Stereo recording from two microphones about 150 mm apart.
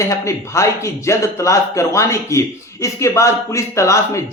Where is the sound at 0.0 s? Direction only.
20° left (ahead or behind).